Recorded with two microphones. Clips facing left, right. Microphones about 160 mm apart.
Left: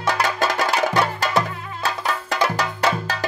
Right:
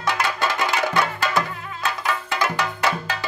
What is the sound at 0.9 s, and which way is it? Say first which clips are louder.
Music: left 2 dB; 35° left (ahead or behind).